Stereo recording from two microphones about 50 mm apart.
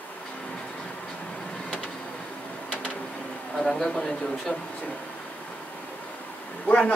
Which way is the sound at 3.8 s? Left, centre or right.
Centre.